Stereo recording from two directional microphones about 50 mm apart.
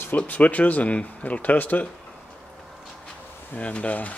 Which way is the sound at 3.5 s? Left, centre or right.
Left.